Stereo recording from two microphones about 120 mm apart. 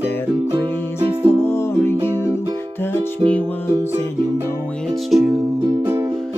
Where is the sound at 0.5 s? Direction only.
35° right (ahead or behind).